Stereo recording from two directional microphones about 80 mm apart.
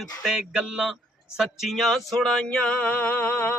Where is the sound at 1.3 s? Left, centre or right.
Centre.